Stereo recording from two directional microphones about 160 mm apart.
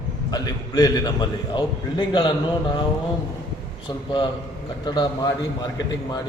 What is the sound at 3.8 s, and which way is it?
A man's voice, 30° left (ahead or behind).